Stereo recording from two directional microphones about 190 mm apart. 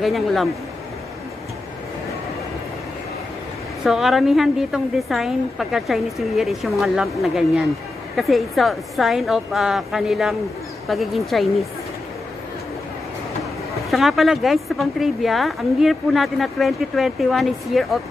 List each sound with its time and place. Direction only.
0.0 s a woman's voice: centre (ahead or behind)
3.8 s a woman's voice: centre (ahead or behind)
13.8 s a woman's voice: centre (ahead or behind)